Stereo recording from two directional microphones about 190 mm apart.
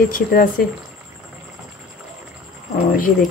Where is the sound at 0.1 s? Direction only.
50° left (ahead or behind).